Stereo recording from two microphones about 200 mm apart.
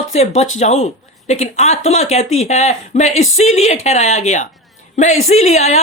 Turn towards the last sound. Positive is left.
turn(degrees=35)  # may be behind; listen again after turning